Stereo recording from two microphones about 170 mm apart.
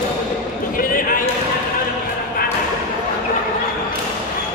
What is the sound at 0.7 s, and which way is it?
Basketball bounce, 55° left (ahead or behind).